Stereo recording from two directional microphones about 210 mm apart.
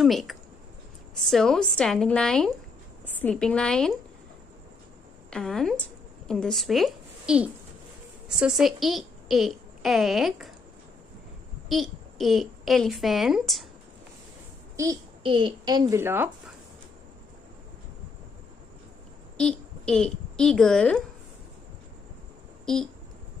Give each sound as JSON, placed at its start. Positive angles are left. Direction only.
{"t": 0.0, "sound": "a woman's voice", "side_deg": 0}
{"t": 5.3, "sound": "a woman's voice", "side_deg": 0}
{"t": 11.7, "sound": "a child's voice", "side_deg": 0}
{"t": 14.8, "sound": "a child's voice", "side_deg": -20}
{"t": 19.3, "sound": "a woman's voice", "side_deg": 5}